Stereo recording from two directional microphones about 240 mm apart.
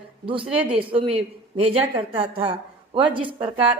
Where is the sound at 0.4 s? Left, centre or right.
Centre.